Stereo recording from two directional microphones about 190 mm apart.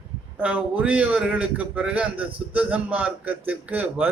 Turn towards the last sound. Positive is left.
turn(degrees=-10)  # may be behind; listen again after turning